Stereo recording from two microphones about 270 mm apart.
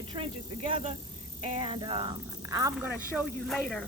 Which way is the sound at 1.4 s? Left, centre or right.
Centre.